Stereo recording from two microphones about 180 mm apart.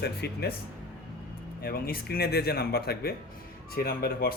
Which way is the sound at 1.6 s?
60° left (ahead or behind).